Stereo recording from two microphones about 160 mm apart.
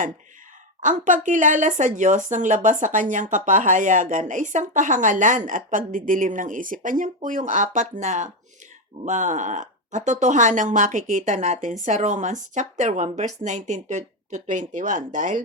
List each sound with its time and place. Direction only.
0.8 s speech: 50° right (ahead or behind)